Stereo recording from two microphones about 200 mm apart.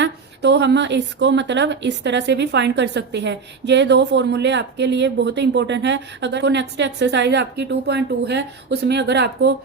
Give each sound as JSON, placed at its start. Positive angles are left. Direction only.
{"t": 0.0, "sound": "a woman's voice", "side_deg": -60}